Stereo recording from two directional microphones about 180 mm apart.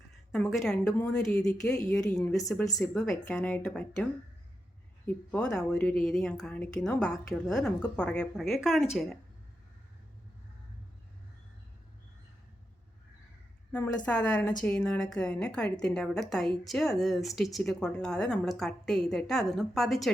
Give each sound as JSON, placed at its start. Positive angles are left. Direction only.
{"t": 0.3, "sound": "a woman's voice", "side_deg": 0}
{"t": 2.6, "sound": "a woman's voice", "side_deg": 15}
{"t": 2.9, "sound": "a woman's voice", "side_deg": 5}
{"t": 5.0, "sound": "a woman's voice", "side_deg": 5}
{"t": 13.7, "sound": "a woman's voice", "side_deg": 10}